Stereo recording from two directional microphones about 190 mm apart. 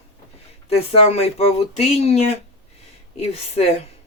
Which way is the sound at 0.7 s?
30° left (ahead or behind).